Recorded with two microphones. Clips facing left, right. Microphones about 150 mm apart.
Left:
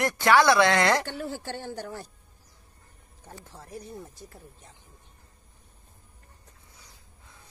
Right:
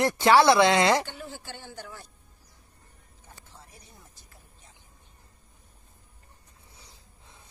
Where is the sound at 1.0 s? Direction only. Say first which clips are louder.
Left 7 dB; 50° left (ahead or behind).